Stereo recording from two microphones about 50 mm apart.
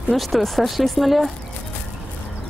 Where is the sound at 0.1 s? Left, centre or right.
Centre.